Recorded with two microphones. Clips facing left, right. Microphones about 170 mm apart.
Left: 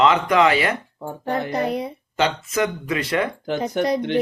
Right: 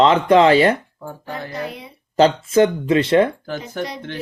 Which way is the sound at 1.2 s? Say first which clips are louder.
Left 7 dB; 65° left (ahead or behind).